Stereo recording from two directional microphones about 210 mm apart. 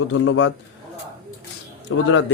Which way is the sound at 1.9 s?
70° left (ahead or behind).